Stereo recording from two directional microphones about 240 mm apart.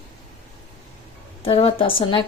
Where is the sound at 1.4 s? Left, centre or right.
Left.